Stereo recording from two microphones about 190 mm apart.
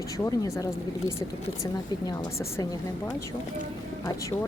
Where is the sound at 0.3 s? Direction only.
15° left (ahead or behind).